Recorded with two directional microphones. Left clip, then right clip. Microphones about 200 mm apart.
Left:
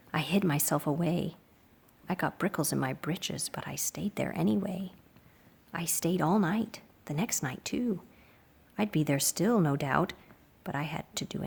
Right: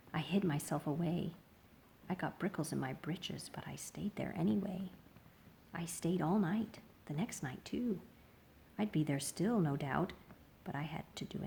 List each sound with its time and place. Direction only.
0.1 s a woman's voice: 35° left (ahead or behind)